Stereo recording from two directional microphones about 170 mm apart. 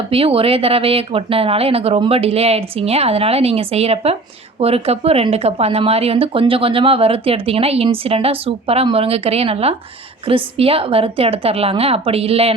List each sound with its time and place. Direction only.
0.1 s speech: 35° right (ahead or behind)